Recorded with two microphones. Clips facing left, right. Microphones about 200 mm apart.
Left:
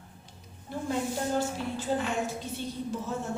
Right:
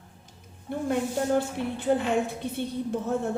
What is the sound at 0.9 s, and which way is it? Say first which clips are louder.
A woman's voice: right 4 dB; 60° right (ahead or behind).